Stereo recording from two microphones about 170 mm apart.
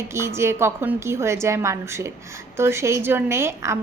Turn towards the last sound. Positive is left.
turn(degrees=-15)  # may be behind; listen again after turning